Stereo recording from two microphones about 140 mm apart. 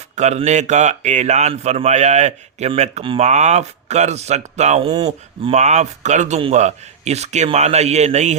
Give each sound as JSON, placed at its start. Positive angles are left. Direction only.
{"t": 0.2, "sound": "a man's voice", "side_deg": -55}